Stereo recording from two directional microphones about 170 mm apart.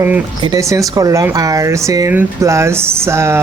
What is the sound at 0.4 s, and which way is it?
Speech, 20° right (ahead or behind).